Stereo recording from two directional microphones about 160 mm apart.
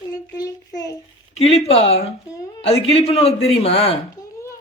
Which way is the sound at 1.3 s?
40° left (ahead or behind).